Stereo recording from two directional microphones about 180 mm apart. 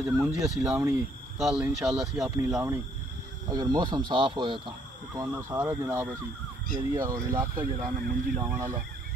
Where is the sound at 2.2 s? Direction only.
15° right (ahead or behind).